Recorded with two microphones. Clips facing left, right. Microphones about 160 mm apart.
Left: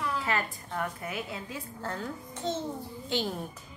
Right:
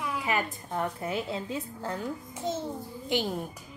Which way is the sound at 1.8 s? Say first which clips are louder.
Right 2 dB; 15° right (ahead or behind).